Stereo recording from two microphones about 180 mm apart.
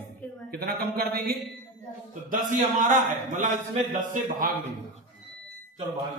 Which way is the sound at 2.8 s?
45° right (ahead or behind).